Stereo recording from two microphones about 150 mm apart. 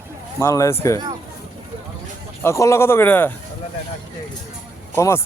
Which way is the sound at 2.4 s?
20° left (ahead or behind).